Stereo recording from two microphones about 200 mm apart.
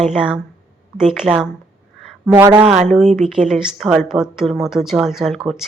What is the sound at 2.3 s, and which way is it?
Speech, 20° right (ahead or behind).